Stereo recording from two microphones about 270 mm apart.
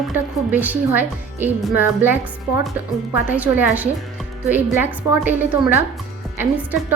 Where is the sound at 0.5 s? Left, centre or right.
Centre.